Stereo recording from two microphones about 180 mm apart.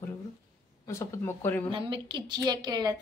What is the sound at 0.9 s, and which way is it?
Speech, 15° left (ahead or behind).